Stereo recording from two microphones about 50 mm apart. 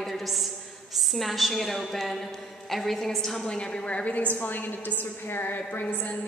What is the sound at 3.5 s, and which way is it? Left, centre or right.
Speech, centre.